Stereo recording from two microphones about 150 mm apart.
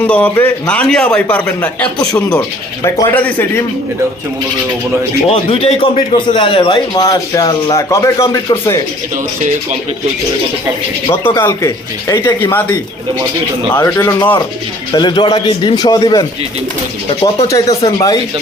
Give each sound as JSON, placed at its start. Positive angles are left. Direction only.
{"t": 0.0, "sound": "a man's voice", "side_deg": 10}
{"t": 2.8, "sound": "a man's voice", "side_deg": 20}
{"t": 5.3, "sound": "a man's voice", "side_deg": 40}
{"t": 11.3, "sound": "a man's voice", "side_deg": 20}
{"t": 13.7, "sound": "a man's voice", "side_deg": 15}
{"t": 14.9, "sound": "a man's voice", "side_deg": 30}
{"t": 17.2, "sound": "a man's voice", "side_deg": 25}